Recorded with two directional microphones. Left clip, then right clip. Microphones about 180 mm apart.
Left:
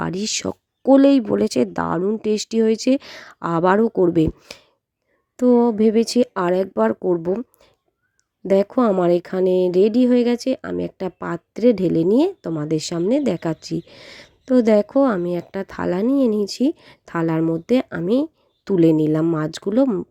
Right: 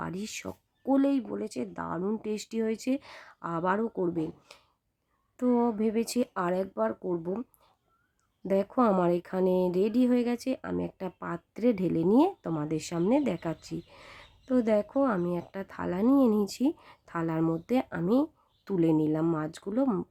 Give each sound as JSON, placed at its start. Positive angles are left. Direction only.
{"t": 0.0, "sound": "speech", "side_deg": 35}
{"t": 5.4, "sound": "speech", "side_deg": 30}
{"t": 8.4, "sound": "speech", "side_deg": 30}